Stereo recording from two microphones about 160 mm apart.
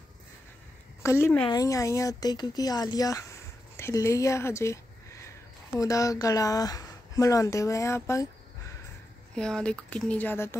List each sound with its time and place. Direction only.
1.0 s speech: 15° left (ahead or behind)
5.8 s speech: 20° left (ahead or behind)
9.3 s speech: 5° left (ahead or behind)